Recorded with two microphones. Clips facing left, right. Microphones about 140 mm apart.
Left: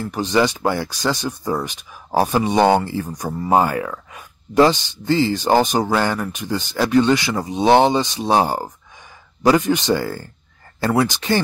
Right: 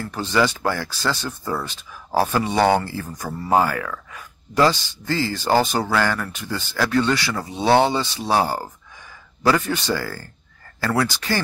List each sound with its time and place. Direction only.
0.0 s speech: 15° left (ahead or behind)